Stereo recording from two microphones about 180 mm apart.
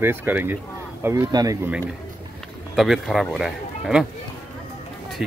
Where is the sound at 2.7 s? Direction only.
Centre (ahead or behind).